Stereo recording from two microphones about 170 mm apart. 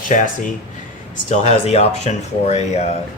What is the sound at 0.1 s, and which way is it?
Speech, 45° left (ahead or behind).